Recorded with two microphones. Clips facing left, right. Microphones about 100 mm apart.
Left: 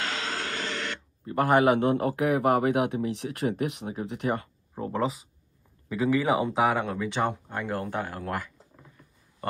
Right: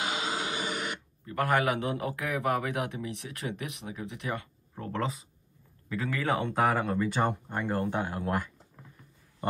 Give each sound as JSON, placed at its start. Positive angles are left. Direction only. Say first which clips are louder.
{"t": 0.0, "sound": "a sound", "louder": "even", "side_deg": -15}
{"t": 1.2, "sound": "a man's voice", "louder": "left 6 dB", "side_deg": 30}
{"t": 4.9, "sound": "speech", "louder": "left 4 dB", "side_deg": 5}
{"t": 7.9, "sound": "speech", "louder": "even", "side_deg": -15}